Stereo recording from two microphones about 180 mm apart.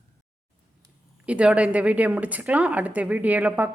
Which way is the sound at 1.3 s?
5° right (ahead or behind).